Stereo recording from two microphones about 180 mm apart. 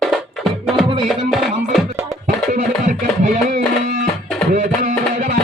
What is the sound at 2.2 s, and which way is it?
Music, 45° right (ahead or behind).